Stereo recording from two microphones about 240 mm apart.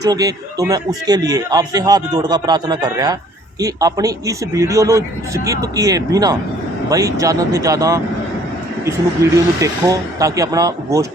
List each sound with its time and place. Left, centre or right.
0.0 s a man's voice: centre